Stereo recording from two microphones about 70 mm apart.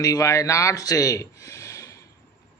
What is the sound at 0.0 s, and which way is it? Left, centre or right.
Speech, left.